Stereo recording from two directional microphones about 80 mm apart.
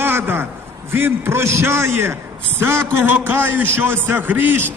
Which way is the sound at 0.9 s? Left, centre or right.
Right.